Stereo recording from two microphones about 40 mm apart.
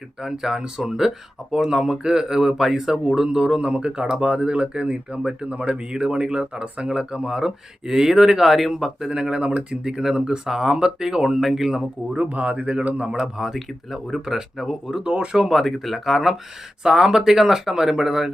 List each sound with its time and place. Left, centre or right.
0.2 s speech: centre; by 9.9 s right
9.9 s speech: centre
12.1 s speech: right
13.1 s speech: right
13.4 s speech: centre
15.0 s speech: right
15.4 s speech: centre